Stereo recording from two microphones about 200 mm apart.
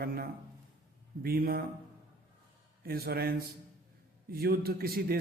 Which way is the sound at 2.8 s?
50° right (ahead or behind).